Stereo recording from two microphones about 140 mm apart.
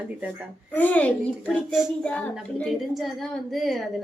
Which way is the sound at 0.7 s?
10° left (ahead or behind).